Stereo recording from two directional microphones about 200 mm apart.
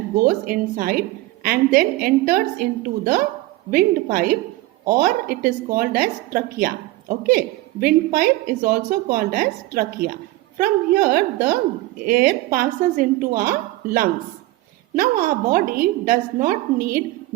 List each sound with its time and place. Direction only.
0.2 s a woman's voice: 45° right (ahead or behind)